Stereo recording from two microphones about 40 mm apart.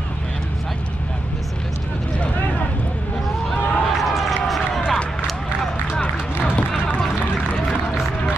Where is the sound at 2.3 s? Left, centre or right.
Left.